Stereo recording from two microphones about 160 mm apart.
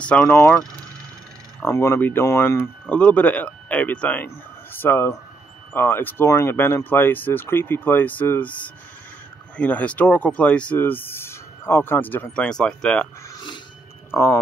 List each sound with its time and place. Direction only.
0.0 s speech: 5° left (ahead or behind)
14.1 s speech: 20° left (ahead or behind)